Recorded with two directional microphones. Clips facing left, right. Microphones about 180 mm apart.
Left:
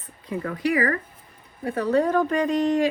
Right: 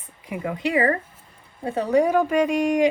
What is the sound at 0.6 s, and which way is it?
Speech, 25° right (ahead or behind).